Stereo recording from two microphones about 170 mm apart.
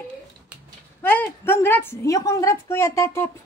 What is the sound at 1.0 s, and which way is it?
A woman's voice, 10° left (ahead or behind).